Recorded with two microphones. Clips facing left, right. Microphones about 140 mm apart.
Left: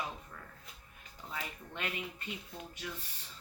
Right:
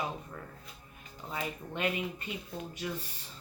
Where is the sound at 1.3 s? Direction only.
15° right (ahead or behind).